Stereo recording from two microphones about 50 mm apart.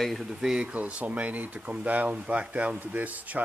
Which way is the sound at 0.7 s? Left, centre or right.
Right.